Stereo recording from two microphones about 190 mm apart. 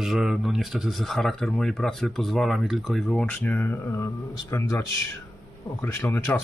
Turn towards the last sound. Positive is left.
turn(degrees=15)  # may be behind; listen again after turning